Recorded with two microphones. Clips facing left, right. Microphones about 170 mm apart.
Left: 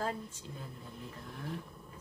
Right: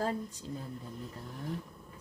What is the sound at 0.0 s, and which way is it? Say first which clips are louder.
Speech: right 3 dB; 35° right (ahead or behind).